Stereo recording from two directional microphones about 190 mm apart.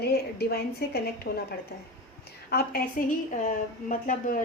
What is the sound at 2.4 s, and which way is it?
A woman's voice, 50° left (ahead or behind).